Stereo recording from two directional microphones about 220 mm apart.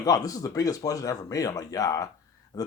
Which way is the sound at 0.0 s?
15° left (ahead or behind).